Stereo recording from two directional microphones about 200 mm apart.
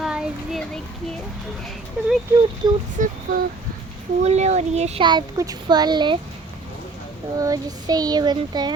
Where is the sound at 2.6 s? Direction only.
20° right (ahead or behind).